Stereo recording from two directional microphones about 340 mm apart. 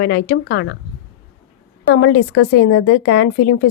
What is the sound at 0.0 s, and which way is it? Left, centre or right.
Speech, left.